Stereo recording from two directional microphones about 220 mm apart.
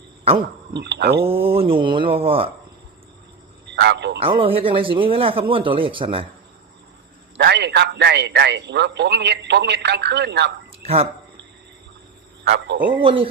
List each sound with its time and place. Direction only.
0.8 s a man's voice: 50° right (ahead or behind)
1.2 s speech: 25° right (ahead or behind)
3.7 s a man's voice: 50° right (ahead or behind)
4.2 s speech: 25° right (ahead or behind)
7.3 s a man's voice: 50° right (ahead or behind)
10.8 s speech: 25° right (ahead or behind)
12.5 s a man's voice: 55° right (ahead or behind)
13.0 s speech: 25° right (ahead or behind)